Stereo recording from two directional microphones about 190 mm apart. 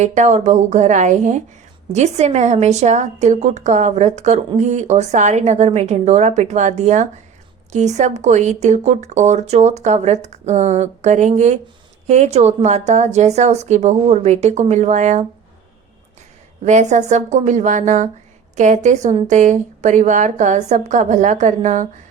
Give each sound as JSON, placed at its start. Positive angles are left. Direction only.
{"t": 0.0, "sound": "a woman's voice", "side_deg": -40}
{"t": 16.6, "sound": "a woman's voice", "side_deg": -40}